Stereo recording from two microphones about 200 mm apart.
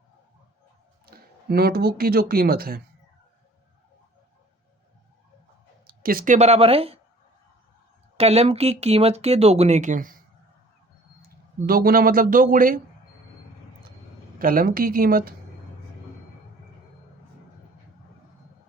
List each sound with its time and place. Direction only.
1.0 s speech: 50° right (ahead or behind)
5.9 s speech: 45° right (ahead or behind); by 7.0 s 30° right (ahead or behind)
8.1 s speech: 30° right (ahead or behind)
11.6 s speech: 45° right (ahead or behind)
14.3 s speech: 45° right (ahead or behind)